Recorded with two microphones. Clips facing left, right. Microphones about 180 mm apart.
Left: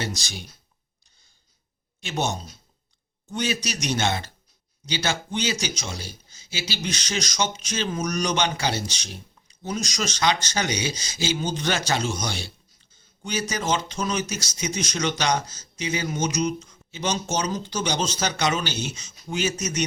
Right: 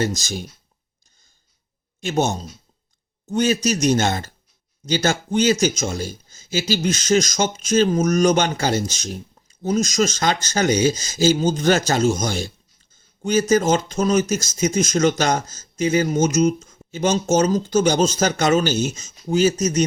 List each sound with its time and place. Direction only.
0.0 s speech: 45° right (ahead or behind)
2.0 s speech: 45° right (ahead or behind)